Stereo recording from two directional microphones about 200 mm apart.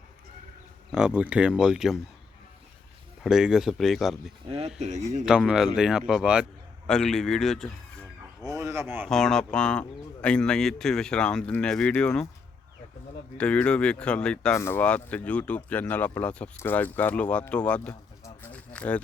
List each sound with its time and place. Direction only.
0.9 s speech: 5° right (ahead or behind)
3.2 s speech: 5° right (ahead or behind)
4.4 s speech: 30° right (ahead or behind)
5.2 s speech: 5° right (ahead or behind)
8.4 s speech: 15° right (ahead or behind)
9.0 s speech: centre (ahead or behind)
13.3 s speech: 5° left (ahead or behind)
18.4 s a sound: 5° left (ahead or behind)